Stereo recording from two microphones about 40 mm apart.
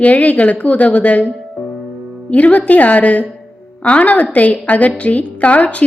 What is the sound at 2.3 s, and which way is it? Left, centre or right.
A woman's voice, left.